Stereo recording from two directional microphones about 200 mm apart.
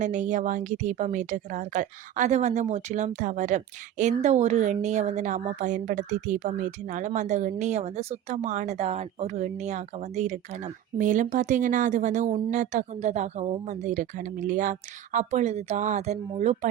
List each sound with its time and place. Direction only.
0.0 s speech: 40° right (ahead or behind)